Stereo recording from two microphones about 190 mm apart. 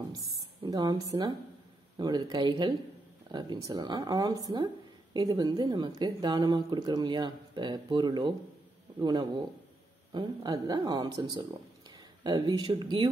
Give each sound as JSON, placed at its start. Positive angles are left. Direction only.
{"t": 0.3, "sound": "a woman's voice", "side_deg": -20}